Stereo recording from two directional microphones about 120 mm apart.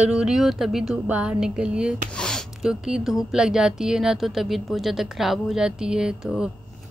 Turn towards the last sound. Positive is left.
turn(degrees=-5)  # may be behind; listen again after turning